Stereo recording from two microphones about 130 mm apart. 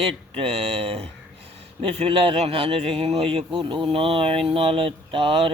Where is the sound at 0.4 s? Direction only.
50° right (ahead or behind).